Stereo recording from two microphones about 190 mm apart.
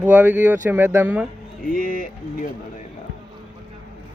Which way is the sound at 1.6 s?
45° left (ahead or behind).